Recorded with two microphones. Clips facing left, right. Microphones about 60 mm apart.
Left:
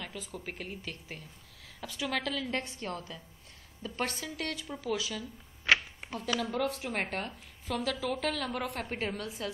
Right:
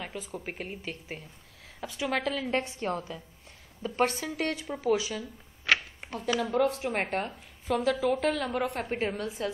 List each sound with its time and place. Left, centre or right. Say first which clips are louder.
0.2 s a woman's voice: right 3 dB; centre
5.9 s a woman's voice: right 4 dB; centre